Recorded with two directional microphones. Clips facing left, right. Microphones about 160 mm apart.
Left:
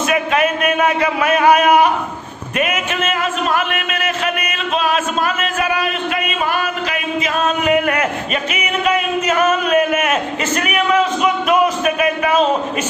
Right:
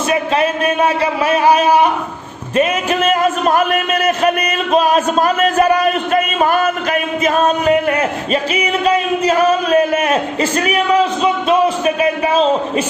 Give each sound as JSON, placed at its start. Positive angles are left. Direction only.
{"t": 0.1, "sound": "a man's voice", "side_deg": -30}
{"t": 7.9, "sound": "a man's voice", "side_deg": -30}